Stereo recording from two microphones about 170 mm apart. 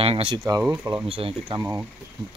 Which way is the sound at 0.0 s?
30° right (ahead or behind).